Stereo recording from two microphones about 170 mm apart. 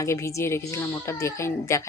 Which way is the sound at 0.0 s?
15° left (ahead or behind).